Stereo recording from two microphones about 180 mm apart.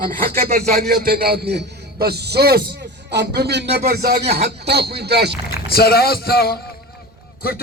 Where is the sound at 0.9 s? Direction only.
55° right (ahead or behind).